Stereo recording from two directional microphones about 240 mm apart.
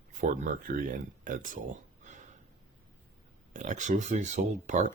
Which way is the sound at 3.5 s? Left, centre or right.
Right.